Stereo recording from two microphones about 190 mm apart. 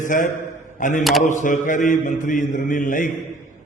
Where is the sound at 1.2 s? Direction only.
40° left (ahead or behind).